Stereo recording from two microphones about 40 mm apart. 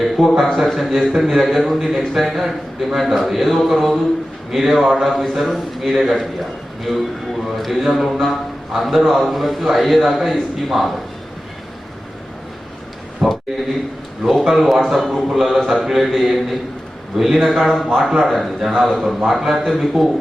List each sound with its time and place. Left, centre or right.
0.2 s a man's voice: centre
5.0 s a man's voice: centre
13.2 s a sound: centre
14.4 s a man's voice: centre